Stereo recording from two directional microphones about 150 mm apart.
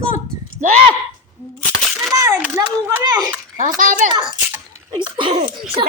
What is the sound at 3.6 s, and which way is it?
Speech, 60° right (ahead or behind).